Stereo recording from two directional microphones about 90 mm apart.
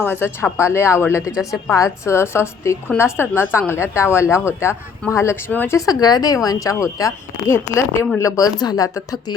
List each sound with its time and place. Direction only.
0.0 s speech: 25° left (ahead or behind)
5.7 s a woman's voice: 45° left (ahead or behind)
8.5 s a woman's voice: 45° left (ahead or behind)